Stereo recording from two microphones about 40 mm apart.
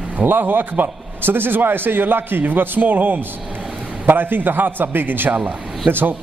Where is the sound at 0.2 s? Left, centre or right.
Right.